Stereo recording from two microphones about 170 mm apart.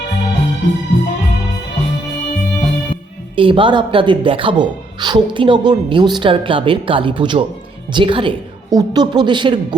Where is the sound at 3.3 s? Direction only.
30° right (ahead or behind).